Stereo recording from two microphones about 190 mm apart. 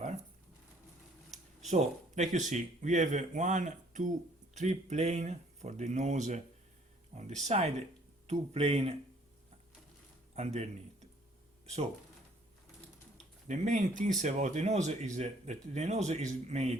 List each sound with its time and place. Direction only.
1.6 s speech: 40° right (ahead or behind)
10.3 s speech: 35° right (ahead or behind)
13.5 s speech: 40° right (ahead or behind)